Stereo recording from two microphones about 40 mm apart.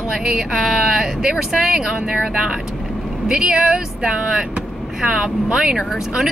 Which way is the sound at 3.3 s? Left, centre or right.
Centre.